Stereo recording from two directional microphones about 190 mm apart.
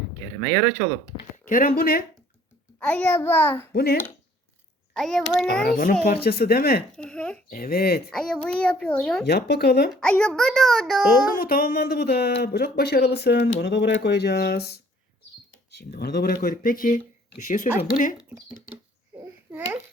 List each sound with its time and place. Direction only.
1.5 s speech: 50° left (ahead or behind)
2.7 s a child's voice: 5° left (ahead or behind)
3.7 s speech: 55° left (ahead or behind)
4.9 s a child's voice: centre (ahead or behind)
5.6 s speech: 50° left (ahead or behind)
6.9 s a child's voice: 5° left (ahead or behind)
7.5 s speech: 50° left (ahead or behind)
8.1 s a child's voice: 5° left (ahead or behind)
9.2 s speech: 60° left (ahead or behind)
9.9 s a child's voice: 5° left (ahead or behind)
11.3 s speech: 50° left (ahead or behind)
15.7 s speech: 55° left (ahead or behind)
18.2 s speech: 10° right (ahead or behind)
19.1 s babbling: 10° right (ahead or behind)